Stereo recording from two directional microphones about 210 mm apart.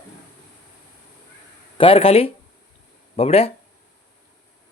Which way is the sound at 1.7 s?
25° left (ahead or behind).